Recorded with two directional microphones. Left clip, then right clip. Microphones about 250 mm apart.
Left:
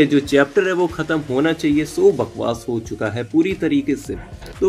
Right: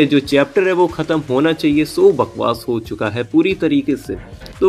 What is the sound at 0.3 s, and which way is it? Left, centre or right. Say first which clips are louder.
Speech: right 2 dB; centre.